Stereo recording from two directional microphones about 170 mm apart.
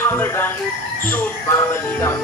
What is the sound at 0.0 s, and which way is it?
Speech, 15° left (ahead or behind).